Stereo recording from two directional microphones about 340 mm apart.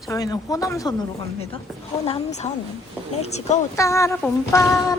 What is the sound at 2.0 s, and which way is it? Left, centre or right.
Speech, centre.